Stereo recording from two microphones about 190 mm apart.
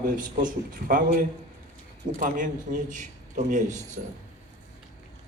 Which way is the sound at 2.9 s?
40° right (ahead or behind).